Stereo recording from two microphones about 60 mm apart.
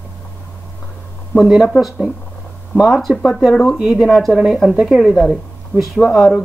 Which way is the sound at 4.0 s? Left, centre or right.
Centre.